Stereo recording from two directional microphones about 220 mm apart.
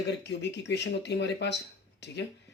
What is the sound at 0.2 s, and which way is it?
Speech, 50° left (ahead or behind).